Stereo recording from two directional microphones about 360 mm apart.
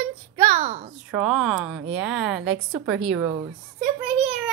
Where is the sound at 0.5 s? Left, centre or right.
Centre.